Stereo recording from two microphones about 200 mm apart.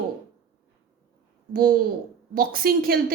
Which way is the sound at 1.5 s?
45° right (ahead or behind).